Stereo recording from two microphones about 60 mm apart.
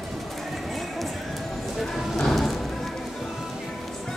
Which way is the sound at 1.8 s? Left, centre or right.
Centre.